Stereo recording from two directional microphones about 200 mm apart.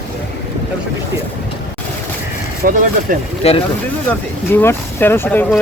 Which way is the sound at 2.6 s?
45° right (ahead or behind).